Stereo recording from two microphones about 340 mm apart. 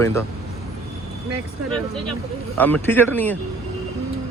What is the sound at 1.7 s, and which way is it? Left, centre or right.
Speech, centre.